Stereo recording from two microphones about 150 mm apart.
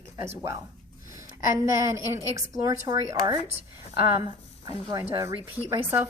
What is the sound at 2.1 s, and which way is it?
A woman's voice, 20° right (ahead or behind).